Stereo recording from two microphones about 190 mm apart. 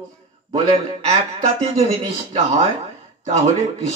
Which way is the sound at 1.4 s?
30° right (ahead or behind).